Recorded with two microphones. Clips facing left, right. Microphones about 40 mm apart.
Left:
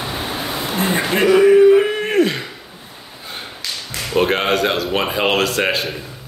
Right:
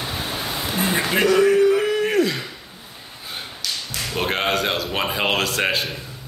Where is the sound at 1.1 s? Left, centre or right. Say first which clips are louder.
Left 5 dB; centre; by 2.3 s left.